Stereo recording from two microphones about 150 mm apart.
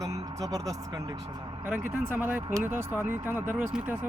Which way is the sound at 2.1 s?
10° right (ahead or behind).